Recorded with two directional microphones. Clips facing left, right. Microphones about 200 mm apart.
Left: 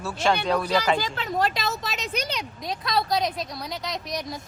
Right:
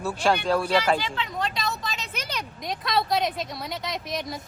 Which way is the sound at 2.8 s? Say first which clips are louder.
Even; centre (ahead or behind).